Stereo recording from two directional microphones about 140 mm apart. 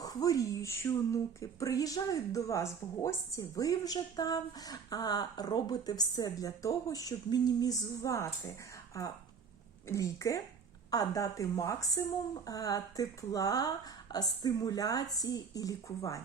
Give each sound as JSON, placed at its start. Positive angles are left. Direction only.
{"t": 0.0, "sound": "a woman's voice", "side_deg": 25}